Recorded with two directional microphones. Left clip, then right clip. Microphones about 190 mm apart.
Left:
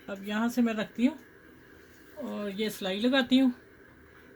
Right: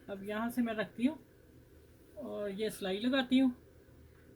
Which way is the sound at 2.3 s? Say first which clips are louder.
Left 3 dB; 50° left (ahead or behind).